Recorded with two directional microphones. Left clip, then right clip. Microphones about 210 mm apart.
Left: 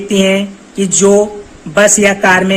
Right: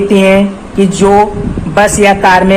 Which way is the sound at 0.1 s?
30° left (ahead or behind).